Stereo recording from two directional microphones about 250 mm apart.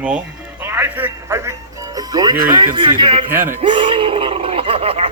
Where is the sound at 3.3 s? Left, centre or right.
Centre.